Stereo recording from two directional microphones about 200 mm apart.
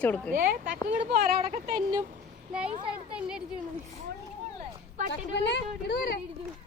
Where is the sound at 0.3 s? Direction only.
45° right (ahead or behind).